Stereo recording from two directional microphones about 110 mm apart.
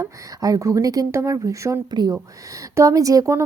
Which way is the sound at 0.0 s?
35° right (ahead or behind).